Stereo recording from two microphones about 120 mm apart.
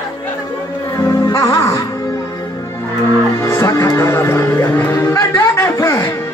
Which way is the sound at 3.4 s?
25° left (ahead or behind).